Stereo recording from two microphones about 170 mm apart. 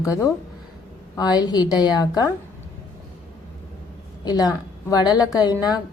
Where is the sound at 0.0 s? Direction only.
20° left (ahead or behind).